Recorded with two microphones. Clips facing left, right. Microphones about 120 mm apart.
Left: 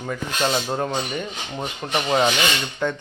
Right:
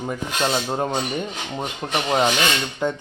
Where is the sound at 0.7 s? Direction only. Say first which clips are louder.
Right 1 dB; 20° right (ahead or behind).